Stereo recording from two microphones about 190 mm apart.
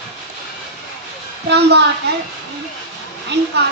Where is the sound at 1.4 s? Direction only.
65° right (ahead or behind).